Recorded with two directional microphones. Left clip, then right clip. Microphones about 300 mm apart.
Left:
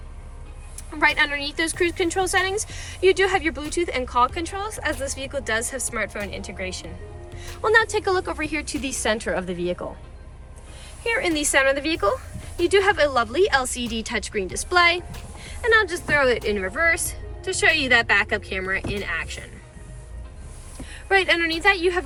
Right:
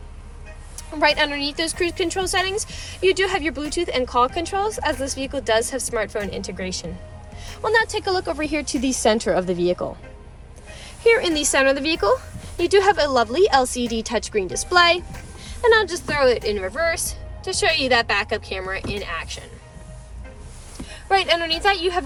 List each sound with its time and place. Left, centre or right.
0.9 s a woman's voice: centre
7.6 s speech: centre
11.0 s a woman's voice: centre
20.9 s a woman's voice: centre